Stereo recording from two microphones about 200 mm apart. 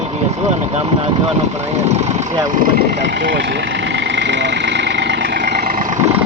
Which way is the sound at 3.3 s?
65° right (ahead or behind).